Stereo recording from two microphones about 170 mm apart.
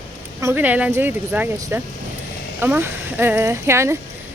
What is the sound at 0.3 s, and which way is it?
Speech, 15° right (ahead or behind).